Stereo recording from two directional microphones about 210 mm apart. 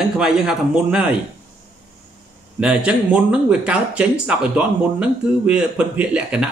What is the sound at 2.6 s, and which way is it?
Speech, 5° right (ahead or behind).